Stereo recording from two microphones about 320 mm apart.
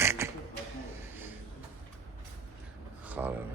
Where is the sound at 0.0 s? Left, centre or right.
Centre.